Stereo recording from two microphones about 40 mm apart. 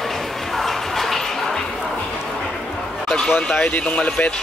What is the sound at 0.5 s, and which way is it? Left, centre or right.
Bow-wow, centre.